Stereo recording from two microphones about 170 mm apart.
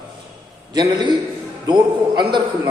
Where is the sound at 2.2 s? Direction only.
25° right (ahead or behind).